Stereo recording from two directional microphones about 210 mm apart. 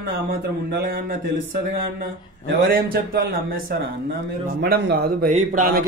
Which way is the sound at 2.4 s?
45° right (ahead or behind).